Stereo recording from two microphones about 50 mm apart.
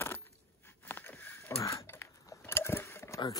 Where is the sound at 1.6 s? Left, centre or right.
Left.